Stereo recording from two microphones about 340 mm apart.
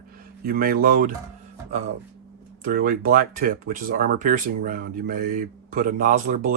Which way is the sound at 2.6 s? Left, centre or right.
Right.